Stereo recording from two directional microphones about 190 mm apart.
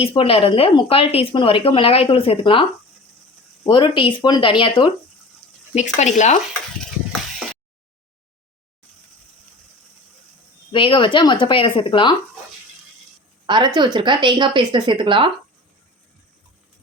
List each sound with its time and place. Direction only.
0.0 s a woman's voice: 30° left (ahead or behind)
3.7 s a woman's voice: 25° left (ahead or behind)
5.7 s speech: 40° left (ahead or behind)
6.7 s a sound: centre (ahead or behind)
10.7 s a woman's voice: 25° left (ahead or behind)
13.5 s a woman's voice: 20° right (ahead or behind)